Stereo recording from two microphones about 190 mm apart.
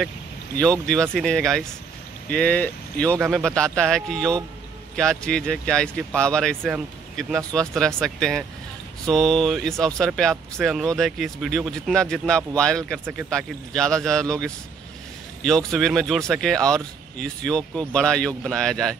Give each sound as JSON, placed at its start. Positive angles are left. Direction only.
{"t": 0.6, "sound": "speech", "side_deg": 5}